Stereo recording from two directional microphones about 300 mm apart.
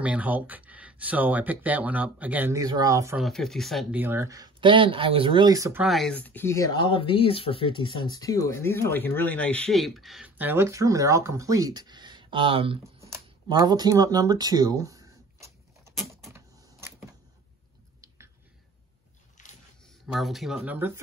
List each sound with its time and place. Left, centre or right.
0.0 s speech: centre
18.0 s finger snapping: centre
19.4 s a sound: left
20.1 s speech: centre